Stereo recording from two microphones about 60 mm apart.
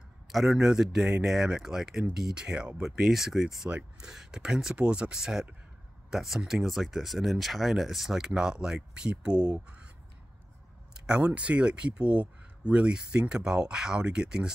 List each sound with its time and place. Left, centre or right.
0.3 s a man's voice: centre
4.7 s speech: centre
11.1 s speech: centre